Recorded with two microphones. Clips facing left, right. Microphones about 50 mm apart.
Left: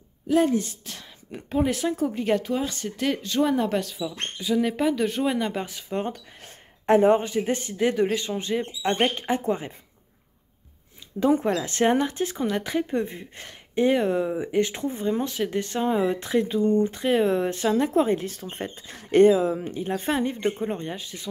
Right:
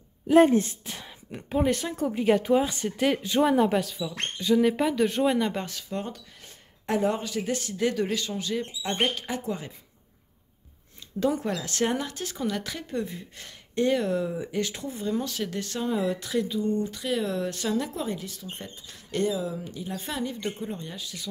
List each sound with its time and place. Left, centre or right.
0.3 s speech: right
0.8 s speech: centre
1.3 s speech: centre
2.4 s speech: centre
5.9 s speech: left
11.1 s speech: left